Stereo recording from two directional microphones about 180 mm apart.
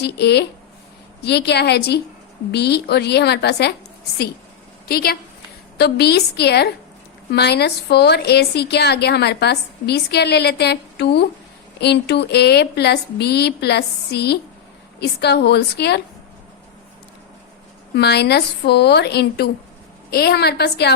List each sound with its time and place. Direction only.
0.0 s a woman's voice: 65° left (ahead or behind)
4.9 s a woman's voice: 55° left (ahead or behind)
17.9 s a woman's voice: 65° left (ahead or behind)